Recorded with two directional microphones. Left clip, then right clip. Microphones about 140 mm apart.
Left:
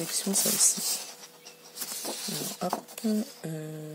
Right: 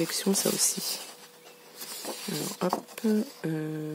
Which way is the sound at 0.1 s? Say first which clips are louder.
Right 2 dB; 50° right (ahead or behind).